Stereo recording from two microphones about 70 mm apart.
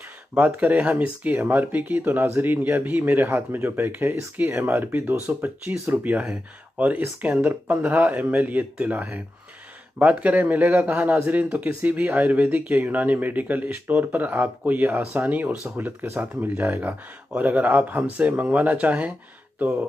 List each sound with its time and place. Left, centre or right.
0.3 s speech: right
15.6 s speech: right
16.0 s speech: right